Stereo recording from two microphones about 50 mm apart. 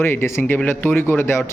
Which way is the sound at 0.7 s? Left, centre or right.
Left.